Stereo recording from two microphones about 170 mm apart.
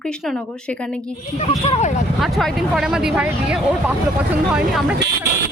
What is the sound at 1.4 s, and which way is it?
Speech, 35° left (ahead or behind).